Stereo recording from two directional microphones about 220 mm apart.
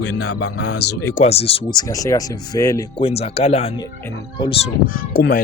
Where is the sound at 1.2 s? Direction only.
30° left (ahead or behind).